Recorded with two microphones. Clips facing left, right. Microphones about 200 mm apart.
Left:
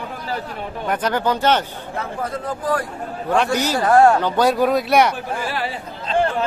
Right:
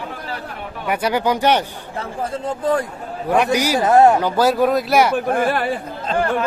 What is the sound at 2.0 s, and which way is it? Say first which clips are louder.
Speech: right 2 dB; 25° right (ahead or behind).